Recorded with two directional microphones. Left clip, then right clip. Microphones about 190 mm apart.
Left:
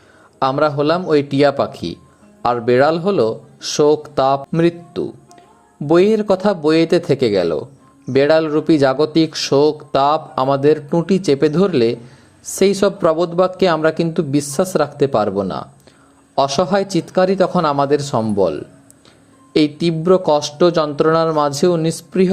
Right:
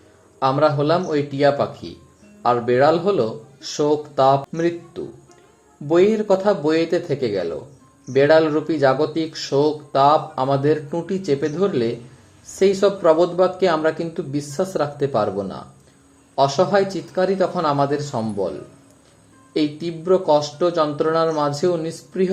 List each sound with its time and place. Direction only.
0.3 s speech: 30° left (ahead or behind)
19.5 s speech: 30° left (ahead or behind)